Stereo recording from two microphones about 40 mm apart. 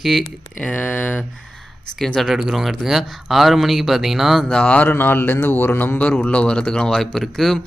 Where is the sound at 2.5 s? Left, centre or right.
Centre.